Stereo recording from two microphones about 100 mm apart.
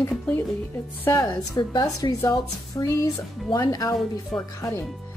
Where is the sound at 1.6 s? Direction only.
45° left (ahead or behind).